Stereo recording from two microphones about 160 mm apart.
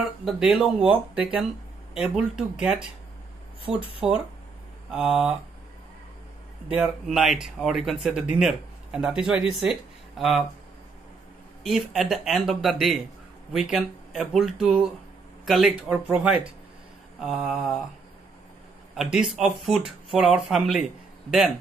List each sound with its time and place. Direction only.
0.2 s speech: centre (ahead or behind)
3.7 s speech: 35° right (ahead or behind)
4.9 s speech: 5° right (ahead or behind)
6.7 s speech: 5° right (ahead or behind)
11.6 s speech: centre (ahead or behind)
18.9 s speech: 5° right (ahead or behind)